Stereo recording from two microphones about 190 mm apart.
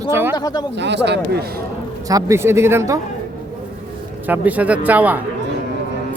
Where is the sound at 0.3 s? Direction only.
20° left (ahead or behind).